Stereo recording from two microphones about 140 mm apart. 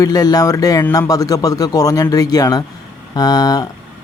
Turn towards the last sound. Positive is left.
turn(degrees=25)  # may be behind; listen again after turning